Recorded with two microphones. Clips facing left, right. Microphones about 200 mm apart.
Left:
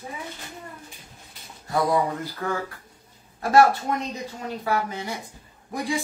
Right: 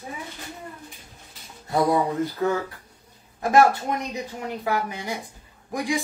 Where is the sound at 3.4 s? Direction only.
20° right (ahead or behind).